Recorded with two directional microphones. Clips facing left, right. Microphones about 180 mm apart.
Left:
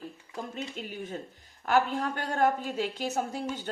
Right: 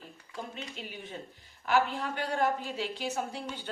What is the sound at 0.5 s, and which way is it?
A woman's voice, 45° left (ahead or behind).